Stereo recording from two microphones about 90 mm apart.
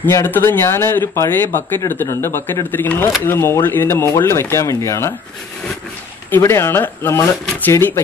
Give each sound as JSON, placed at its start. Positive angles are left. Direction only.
{"t": 0.1, "sound": "speech", "side_deg": 25}
{"t": 6.3, "sound": "speech", "side_deg": 30}